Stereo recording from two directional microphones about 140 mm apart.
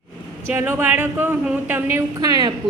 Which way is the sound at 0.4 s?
15° right (ahead or behind).